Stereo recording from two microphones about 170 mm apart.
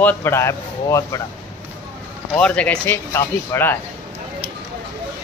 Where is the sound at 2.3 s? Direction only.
5° left (ahead or behind).